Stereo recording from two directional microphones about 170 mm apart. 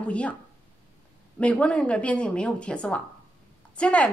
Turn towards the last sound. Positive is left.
turn(degrees=5)  # may be behind; listen again after turning